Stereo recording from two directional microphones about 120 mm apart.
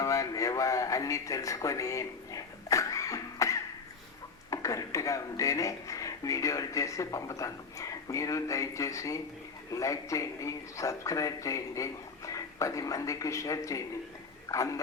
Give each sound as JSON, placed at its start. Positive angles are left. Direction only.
{"t": 0.0, "sound": "music", "side_deg": 30}
{"t": 4.5, "sound": "speech", "side_deg": 30}